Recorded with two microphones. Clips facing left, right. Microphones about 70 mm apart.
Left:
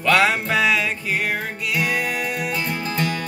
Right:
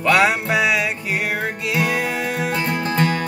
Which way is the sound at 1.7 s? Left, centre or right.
Right.